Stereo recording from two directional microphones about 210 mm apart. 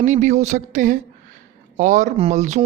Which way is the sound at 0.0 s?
35° right (ahead or behind).